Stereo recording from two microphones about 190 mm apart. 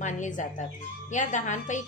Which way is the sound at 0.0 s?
40° left (ahead or behind).